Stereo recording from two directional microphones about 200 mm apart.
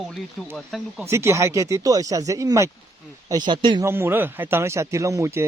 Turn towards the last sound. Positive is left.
turn(degrees=-15)  # may be behind; listen again after turning